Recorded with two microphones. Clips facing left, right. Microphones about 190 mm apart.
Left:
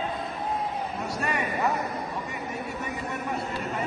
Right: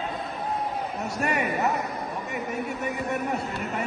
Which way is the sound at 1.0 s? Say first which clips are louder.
Right 4 dB; 25° right (ahead or behind).